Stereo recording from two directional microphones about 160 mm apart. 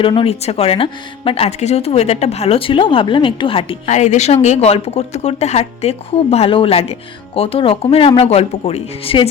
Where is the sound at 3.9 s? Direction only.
45° left (ahead or behind).